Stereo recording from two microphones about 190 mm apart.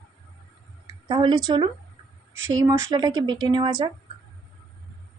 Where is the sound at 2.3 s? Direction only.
90° right.